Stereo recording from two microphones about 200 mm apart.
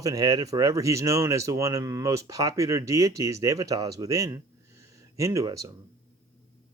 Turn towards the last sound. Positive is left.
turn(degrees=-15)  # may be behind; listen again after turning